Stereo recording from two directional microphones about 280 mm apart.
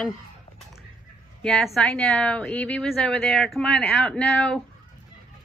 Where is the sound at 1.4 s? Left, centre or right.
Centre.